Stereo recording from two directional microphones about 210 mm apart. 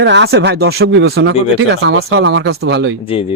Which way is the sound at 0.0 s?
55° right (ahead or behind).